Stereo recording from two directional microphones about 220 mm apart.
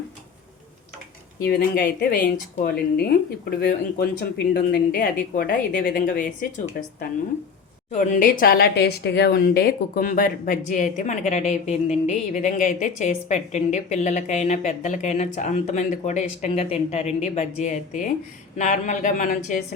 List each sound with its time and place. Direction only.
1.5 s a woman's voice: 45° left (ahead or behind)